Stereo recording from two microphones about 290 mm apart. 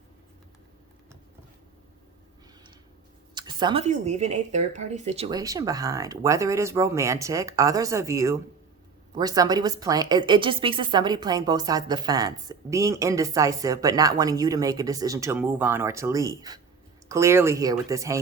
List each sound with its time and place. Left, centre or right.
3.3 s a woman's voice: centre